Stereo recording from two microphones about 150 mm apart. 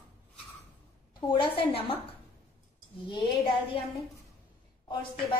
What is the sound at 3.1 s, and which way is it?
Speech, 35° left (ahead or behind).